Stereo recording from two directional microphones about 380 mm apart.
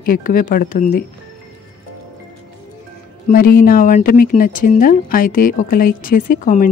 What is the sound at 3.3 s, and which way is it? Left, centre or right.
Speech, left.